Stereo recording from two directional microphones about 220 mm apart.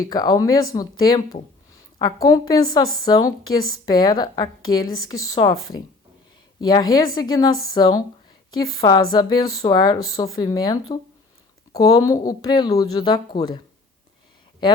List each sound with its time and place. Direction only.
0.0 s a woman's voice: 15° left (ahead or behind)